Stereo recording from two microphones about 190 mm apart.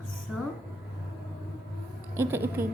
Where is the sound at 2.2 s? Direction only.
10° right (ahead or behind).